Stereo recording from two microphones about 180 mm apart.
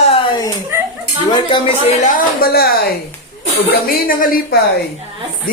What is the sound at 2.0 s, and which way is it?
Speech, 55° left (ahead or behind).